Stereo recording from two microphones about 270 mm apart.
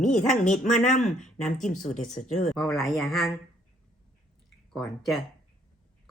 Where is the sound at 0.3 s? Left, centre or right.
Left.